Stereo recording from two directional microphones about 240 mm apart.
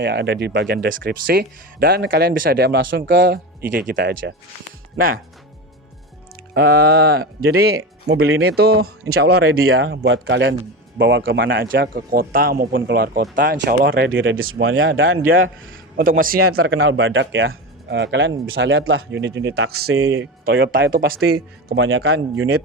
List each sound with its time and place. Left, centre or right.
0.0 s speech: right
6.5 s speech: right
8.2 s a man's voice: right
8.5 s a man's voice: right
16.0 s speech: right
16.4 s a man's voice: right
20.4 s speech: right
21.8 s a man's voice: right